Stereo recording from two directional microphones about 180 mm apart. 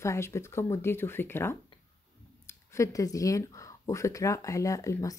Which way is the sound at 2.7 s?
20° left (ahead or behind).